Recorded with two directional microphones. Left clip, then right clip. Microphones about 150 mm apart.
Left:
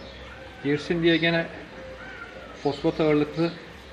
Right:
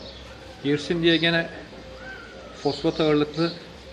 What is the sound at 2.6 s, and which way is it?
Speech, 5° left (ahead or behind).